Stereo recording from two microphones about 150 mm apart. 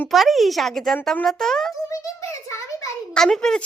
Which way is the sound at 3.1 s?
5° left (ahead or behind).